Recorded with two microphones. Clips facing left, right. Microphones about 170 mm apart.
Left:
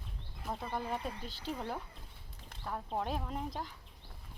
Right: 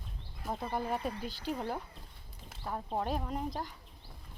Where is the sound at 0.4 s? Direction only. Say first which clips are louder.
Right 3 dB; 5° right (ahead or behind).